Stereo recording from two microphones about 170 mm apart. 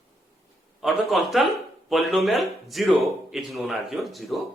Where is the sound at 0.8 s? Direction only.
Centre (ahead or behind).